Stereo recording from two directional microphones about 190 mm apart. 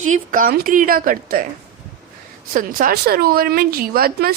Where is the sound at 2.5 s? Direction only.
45° right (ahead or behind).